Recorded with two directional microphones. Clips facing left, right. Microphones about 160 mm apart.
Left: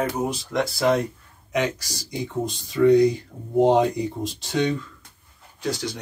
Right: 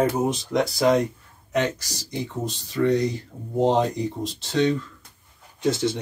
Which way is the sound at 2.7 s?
10° left (ahead or behind).